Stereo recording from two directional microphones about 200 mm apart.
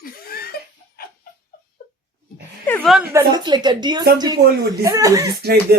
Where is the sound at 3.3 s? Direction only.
20° right (ahead or behind).